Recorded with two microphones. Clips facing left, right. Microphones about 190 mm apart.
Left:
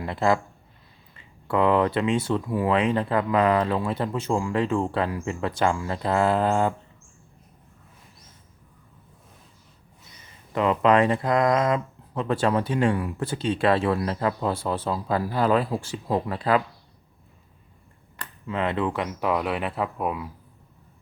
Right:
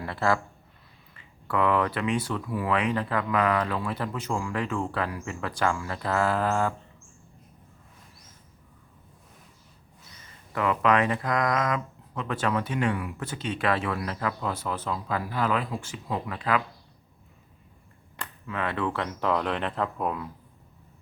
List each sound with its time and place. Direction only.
0.0 s speech: 20° left (ahead or behind)
10.5 s speech: 25° left (ahead or behind)
18.4 s speech: 25° left (ahead or behind)